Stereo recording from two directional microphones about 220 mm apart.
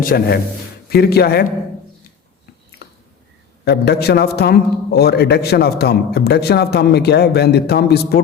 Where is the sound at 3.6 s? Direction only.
50° left (ahead or behind).